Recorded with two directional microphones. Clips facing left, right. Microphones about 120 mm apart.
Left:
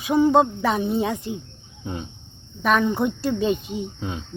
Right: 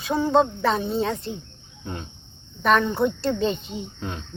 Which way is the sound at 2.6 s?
10° left (ahead or behind).